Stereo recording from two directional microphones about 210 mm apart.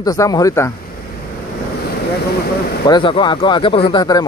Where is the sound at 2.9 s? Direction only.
25° left (ahead or behind).